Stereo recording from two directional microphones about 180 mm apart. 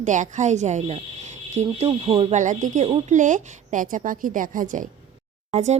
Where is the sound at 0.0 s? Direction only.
45° right (ahead or behind).